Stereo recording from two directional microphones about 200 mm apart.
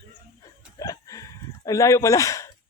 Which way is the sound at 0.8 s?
15° left (ahead or behind).